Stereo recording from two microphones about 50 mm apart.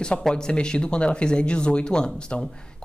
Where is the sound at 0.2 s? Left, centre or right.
Centre.